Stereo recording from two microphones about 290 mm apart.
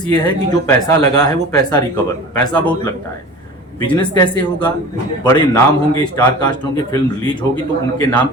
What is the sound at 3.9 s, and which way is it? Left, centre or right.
A man's voice, centre.